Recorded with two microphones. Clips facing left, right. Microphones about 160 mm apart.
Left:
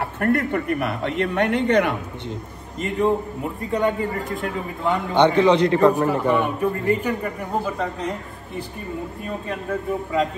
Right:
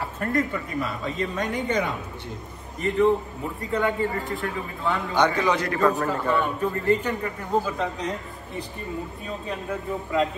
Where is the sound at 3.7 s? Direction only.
20° left (ahead or behind).